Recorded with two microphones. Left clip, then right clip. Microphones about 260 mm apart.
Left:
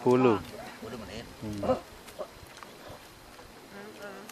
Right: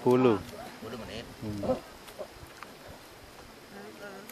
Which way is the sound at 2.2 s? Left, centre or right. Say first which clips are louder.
Left 2 dB; left.